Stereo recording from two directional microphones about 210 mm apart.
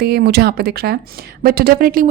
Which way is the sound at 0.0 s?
50° right (ahead or behind).